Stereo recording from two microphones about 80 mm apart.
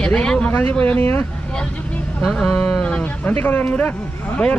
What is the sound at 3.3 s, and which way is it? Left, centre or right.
Speech, left.